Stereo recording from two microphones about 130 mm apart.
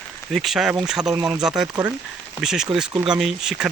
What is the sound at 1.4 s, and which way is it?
Speech, 5° right (ahead or behind).